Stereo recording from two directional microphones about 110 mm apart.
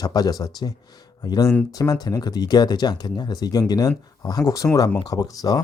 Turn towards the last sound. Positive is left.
turn(degrees=35)  # may be behind; listen again after turning